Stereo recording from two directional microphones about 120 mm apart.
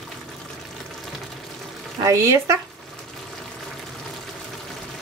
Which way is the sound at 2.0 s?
25° right (ahead or behind).